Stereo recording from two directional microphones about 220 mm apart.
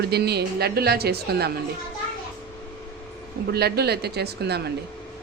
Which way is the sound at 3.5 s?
45° right (ahead or behind).